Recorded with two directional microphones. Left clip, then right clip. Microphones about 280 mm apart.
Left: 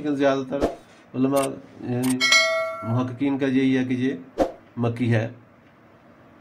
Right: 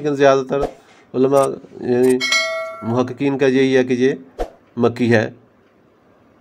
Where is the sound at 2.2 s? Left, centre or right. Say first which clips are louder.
Even; centre.